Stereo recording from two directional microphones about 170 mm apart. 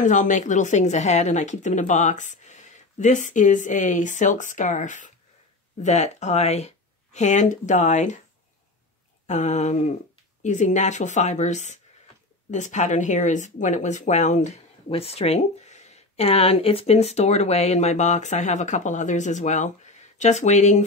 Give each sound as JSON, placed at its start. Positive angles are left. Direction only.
{"t": 0.0, "sound": "speech", "side_deg": 50}
{"t": 9.3, "sound": "speech", "side_deg": 45}